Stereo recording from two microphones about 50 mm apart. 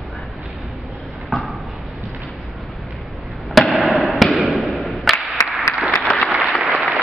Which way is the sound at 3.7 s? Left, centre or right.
Centre.